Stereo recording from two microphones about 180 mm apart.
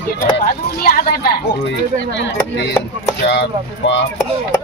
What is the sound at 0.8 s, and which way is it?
Speech, 55° left (ahead or behind).